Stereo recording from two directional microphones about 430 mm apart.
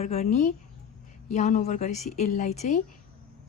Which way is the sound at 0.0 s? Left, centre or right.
Centre.